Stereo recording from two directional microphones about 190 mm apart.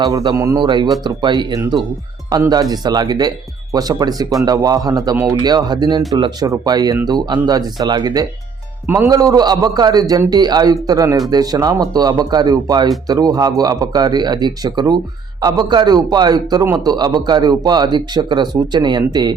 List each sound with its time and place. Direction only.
0.0 s a man's voice: 20° right (ahead or behind)